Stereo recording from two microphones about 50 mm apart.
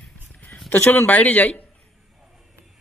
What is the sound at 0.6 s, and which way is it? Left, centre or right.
Speech, left.